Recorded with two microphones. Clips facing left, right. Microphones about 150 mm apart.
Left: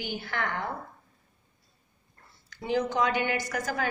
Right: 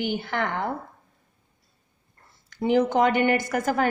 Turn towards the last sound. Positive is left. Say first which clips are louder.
# right 7 dB
turn(degrees=-55)  # may be behind; listen again after turning